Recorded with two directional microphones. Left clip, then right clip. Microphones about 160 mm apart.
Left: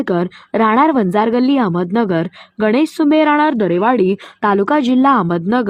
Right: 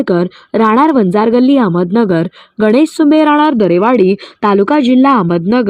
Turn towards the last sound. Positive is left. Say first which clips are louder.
# right 4 dB
turn(degrees=-15)  # may be behind; listen again after turning